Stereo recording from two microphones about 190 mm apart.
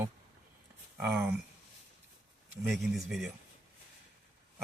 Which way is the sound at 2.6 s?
Centre (ahead or behind).